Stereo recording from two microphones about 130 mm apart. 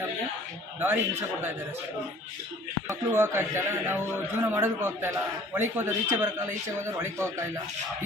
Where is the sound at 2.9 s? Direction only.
20° right (ahead or behind).